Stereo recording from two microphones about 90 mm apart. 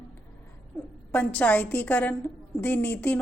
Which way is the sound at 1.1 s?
15° left (ahead or behind).